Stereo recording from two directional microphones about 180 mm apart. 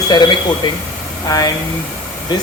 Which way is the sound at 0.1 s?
25° left (ahead or behind).